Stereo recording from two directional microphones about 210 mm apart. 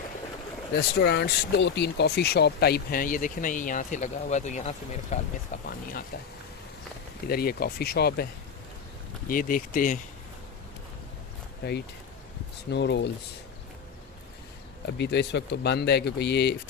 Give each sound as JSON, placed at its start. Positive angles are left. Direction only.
{"t": 0.8, "sound": "speech", "side_deg": 50}
{"t": 5.6, "sound": "speech", "side_deg": 45}
{"t": 7.3, "sound": "speech", "side_deg": 45}
{"t": 9.3, "sound": "speech", "side_deg": 40}
{"t": 11.6, "sound": "speech", "side_deg": 50}
{"t": 14.9, "sound": "speech", "side_deg": 55}